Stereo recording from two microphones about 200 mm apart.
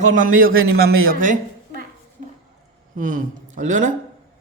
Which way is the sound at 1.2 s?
40° right (ahead or behind).